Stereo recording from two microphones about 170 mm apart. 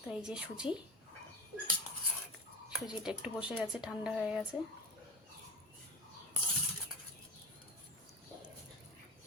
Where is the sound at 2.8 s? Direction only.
5° right (ahead or behind).